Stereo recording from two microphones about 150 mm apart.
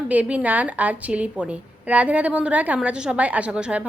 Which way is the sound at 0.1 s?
10° right (ahead or behind).